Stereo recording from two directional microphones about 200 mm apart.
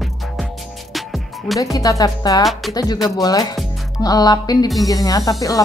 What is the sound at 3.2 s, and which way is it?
Speech, 20° left (ahead or behind).